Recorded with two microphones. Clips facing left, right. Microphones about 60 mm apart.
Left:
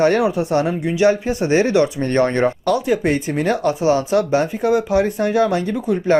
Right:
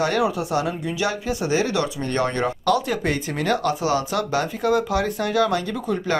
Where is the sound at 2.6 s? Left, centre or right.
Left.